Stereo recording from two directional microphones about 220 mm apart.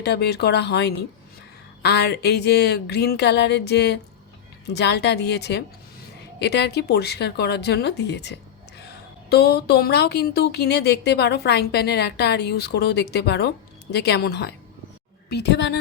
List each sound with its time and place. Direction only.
0.0 s speech: 50° left (ahead or behind)